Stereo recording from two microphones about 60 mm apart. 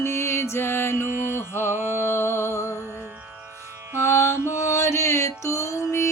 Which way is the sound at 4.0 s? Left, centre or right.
Left.